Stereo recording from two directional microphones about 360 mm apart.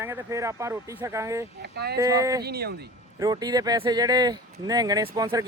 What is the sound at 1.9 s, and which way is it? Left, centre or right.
Speech, centre.